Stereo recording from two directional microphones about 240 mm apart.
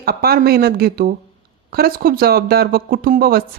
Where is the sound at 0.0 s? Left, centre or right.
Right.